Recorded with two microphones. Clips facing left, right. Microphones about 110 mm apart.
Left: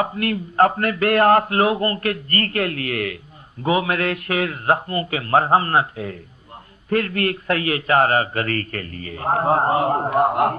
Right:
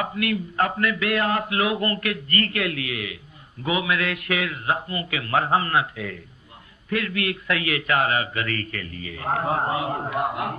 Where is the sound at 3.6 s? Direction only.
40° left (ahead or behind).